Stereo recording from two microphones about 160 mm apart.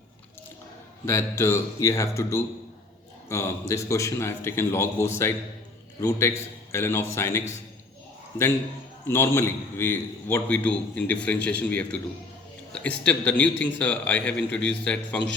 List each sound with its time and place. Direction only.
1.0 s a man's voice: 15° left (ahead or behind)
9.0 s a man's voice: 15° left (ahead or behind)